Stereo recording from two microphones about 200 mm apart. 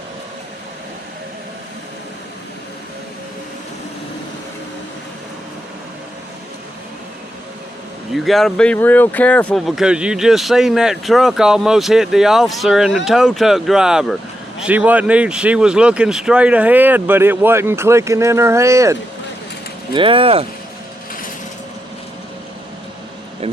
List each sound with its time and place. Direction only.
8.1 s speech: centre (ahead or behind)
19.9 s speech: 25° right (ahead or behind)